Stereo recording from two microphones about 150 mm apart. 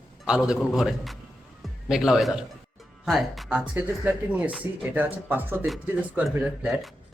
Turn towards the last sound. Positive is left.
turn(degrees=-5)  # may be behind; listen again after turning